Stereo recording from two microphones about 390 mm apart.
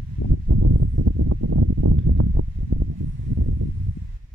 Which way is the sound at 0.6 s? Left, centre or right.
Right.